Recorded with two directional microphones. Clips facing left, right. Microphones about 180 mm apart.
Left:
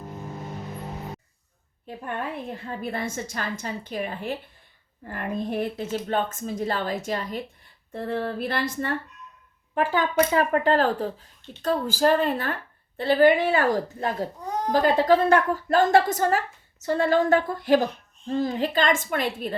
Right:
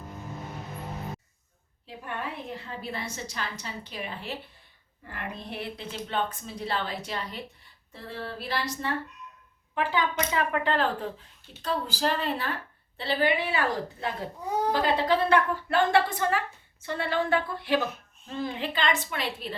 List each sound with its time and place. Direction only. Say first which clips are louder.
1.9 s a woman's voice: left 4 dB; 50° left (ahead or behind)